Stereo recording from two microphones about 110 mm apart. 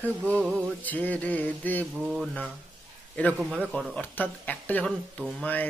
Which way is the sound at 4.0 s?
15° left (ahead or behind).